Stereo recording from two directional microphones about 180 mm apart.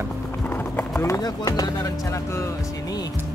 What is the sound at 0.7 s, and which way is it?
Speech, 15° left (ahead or behind).